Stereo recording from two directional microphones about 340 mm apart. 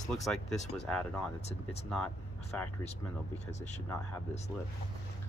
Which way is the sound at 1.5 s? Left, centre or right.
Centre.